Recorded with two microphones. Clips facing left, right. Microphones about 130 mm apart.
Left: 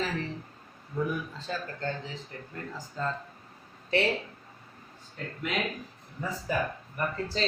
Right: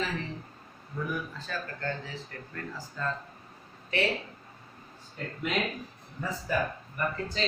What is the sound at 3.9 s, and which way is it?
Speech, 30° left (ahead or behind).